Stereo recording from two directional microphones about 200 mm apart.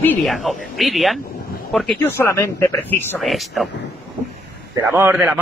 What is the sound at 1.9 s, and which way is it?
Speech, 10° left (ahead or behind).